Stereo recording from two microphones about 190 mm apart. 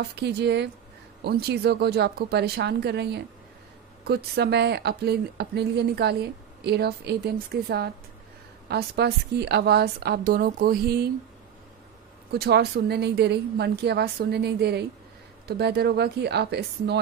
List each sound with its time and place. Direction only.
0.1 s a woman's voice: 60° right (ahead or behind)
12.3 s a woman's voice: 60° right (ahead or behind)